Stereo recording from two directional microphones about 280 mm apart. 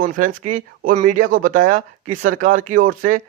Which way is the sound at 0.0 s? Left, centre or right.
Right.